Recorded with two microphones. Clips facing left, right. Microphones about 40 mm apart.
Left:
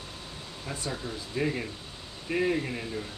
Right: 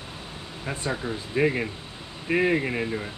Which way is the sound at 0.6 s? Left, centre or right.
Right.